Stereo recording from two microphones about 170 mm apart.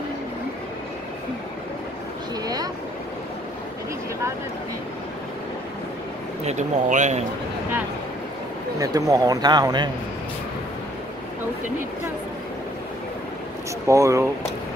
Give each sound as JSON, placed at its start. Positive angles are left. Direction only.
{"t": 2.4, "sound": "boat", "side_deg": -25}
{"t": 6.4, "sound": "speech", "side_deg": -45}
{"t": 8.7, "sound": "speech", "side_deg": -20}
{"t": 13.8, "sound": "speech", "side_deg": -20}